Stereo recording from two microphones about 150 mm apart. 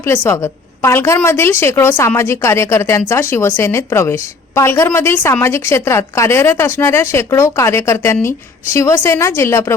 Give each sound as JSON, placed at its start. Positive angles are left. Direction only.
{"t": 0.8, "sound": "speech", "side_deg": 15}